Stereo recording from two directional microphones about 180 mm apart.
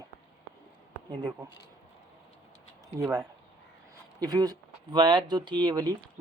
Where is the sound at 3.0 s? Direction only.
20° right (ahead or behind).